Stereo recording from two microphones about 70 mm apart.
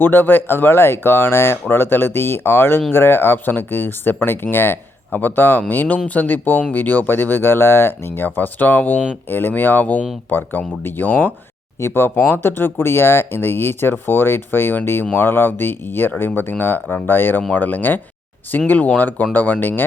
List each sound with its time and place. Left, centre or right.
0.0 s speech: left
11.8 s speech: left